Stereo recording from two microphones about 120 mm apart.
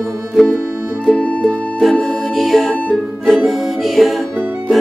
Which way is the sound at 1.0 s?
10° left (ahead or behind).